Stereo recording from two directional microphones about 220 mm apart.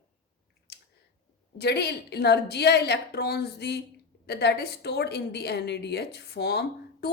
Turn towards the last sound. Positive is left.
turn(degrees=50)  # may be behind; listen again after turning